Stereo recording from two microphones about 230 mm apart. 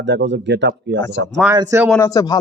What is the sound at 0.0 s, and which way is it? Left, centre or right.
A man's voice, right.